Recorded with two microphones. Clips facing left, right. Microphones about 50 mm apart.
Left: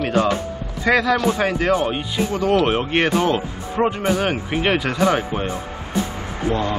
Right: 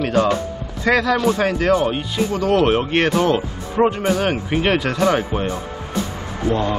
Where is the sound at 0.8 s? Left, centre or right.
Centre.